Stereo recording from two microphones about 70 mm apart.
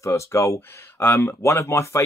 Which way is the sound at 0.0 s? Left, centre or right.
Left.